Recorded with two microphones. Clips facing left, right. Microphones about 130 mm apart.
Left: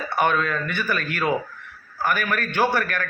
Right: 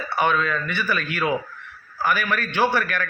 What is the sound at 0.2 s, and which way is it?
A man's voice, 45° left (ahead or behind).